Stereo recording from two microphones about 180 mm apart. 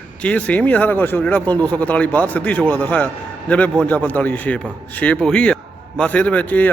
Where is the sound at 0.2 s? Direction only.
5° left (ahead or behind).